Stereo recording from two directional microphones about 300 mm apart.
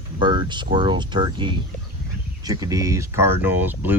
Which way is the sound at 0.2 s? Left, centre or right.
Centre.